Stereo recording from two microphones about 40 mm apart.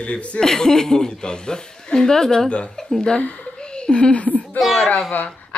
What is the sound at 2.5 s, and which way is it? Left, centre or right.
Speech, left.